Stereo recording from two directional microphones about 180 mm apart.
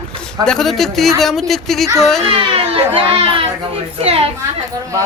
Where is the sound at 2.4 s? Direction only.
30° right (ahead or behind).